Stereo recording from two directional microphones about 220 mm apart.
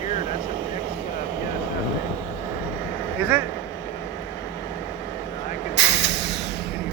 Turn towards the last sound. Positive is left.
turn(degrees=50)  # may be behind; listen again after turning